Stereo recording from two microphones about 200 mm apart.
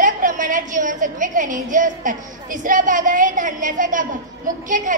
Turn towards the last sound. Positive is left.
turn(degrees=-40)  # may be behind; listen again after turning